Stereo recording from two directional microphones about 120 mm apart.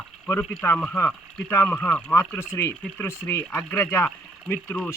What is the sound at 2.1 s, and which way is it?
Speech, 20° left (ahead or behind).